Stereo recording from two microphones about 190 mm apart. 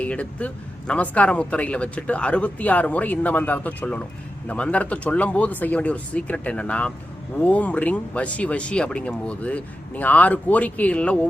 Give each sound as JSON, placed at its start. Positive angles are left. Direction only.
{"t": 0.0, "sound": "a man's voice", "side_deg": 5}